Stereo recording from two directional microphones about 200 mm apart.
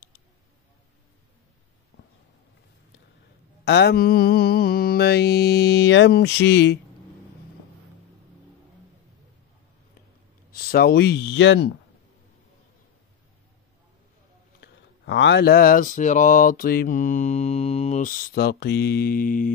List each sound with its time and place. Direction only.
3.6 s mantra: 55° left (ahead or behind)
10.5 s speech: 50° left (ahead or behind)
14.6 s mantra: 60° left (ahead or behind); by 19.5 s 45° left (ahead or behind)